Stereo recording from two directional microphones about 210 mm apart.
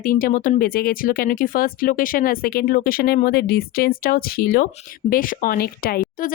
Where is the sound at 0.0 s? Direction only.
40° left (ahead or behind).